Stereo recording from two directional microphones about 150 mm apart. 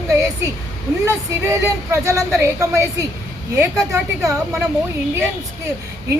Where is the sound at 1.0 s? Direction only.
20° right (ahead or behind).